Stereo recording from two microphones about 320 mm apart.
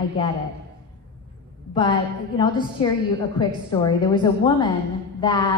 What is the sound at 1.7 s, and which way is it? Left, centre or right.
A woman's voice, centre.